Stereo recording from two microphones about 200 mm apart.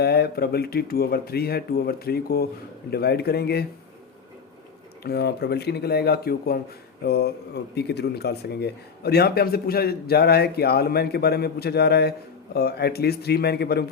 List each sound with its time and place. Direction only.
0.0 s speech: 50° left (ahead or behind)
5.0 s speech: 55° left (ahead or behind)